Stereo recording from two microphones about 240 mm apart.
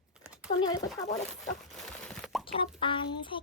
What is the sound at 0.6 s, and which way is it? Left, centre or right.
Speech, centre.